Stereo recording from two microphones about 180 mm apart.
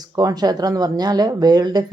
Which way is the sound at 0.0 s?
20° right (ahead or behind).